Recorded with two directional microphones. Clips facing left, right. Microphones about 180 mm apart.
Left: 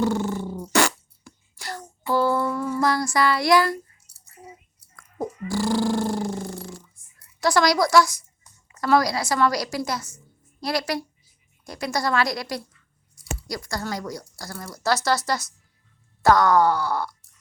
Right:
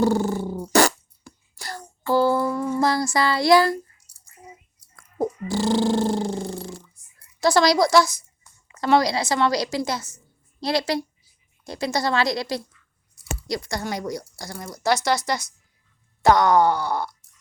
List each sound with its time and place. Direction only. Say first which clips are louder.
0.0 s beatboxing: right 3 dB; 35° right (ahead or behind)
0.6 s fart: right 4 dB; 40° right (ahead or behind)
2.5 s a sound: right 1 dB; 20° right (ahead or behind)
4.1 s a sound: left 2 dB; 10° right (ahead or behind)
4.9 s dog: right 5 dB; 25° right (ahead or behind)
7.4 s a woman's voice: right 2 dB; 25° right (ahead or behind)